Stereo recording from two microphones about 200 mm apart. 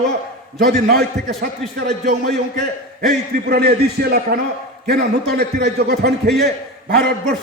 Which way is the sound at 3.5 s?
50° right (ahead or behind).